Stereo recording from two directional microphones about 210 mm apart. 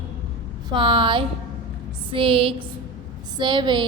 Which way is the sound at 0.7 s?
20° right (ahead or behind).